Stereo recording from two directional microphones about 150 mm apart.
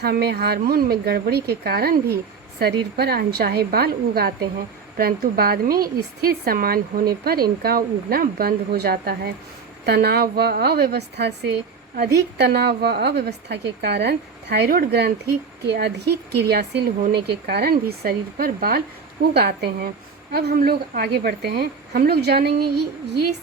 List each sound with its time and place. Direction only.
0.0 s a woman's voice: 90° right